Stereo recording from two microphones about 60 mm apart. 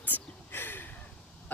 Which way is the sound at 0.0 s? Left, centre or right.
Left.